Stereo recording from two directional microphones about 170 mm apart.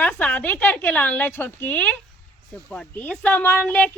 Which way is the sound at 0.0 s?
10° left (ahead or behind).